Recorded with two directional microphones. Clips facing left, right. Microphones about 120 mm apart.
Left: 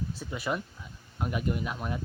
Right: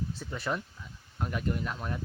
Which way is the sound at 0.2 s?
10° left (ahead or behind).